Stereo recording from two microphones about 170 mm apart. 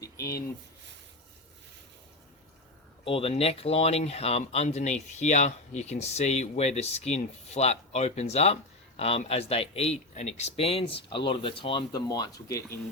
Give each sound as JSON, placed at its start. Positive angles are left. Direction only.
{"t": 3.0, "sound": "speech", "side_deg": 35}